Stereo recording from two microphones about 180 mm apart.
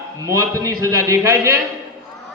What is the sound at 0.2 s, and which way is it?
Speech, 20° right (ahead or behind).